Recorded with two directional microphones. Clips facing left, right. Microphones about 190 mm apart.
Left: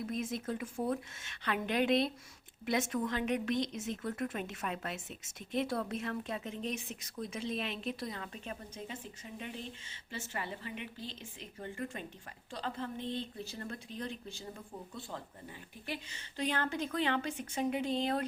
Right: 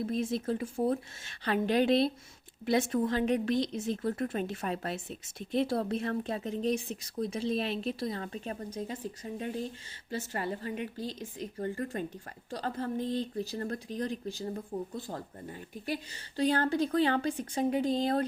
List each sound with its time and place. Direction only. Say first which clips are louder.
0.0 s speech: right 6 dB; 30° right (ahead or behind)